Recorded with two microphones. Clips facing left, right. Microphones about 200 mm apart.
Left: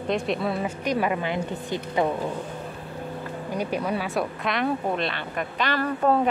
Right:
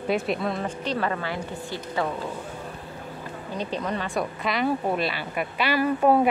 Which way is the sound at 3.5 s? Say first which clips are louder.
Left 2 dB; 10° left (ahead or behind).